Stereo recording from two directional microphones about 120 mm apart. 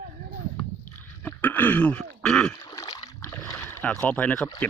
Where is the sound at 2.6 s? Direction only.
30° left (ahead or behind).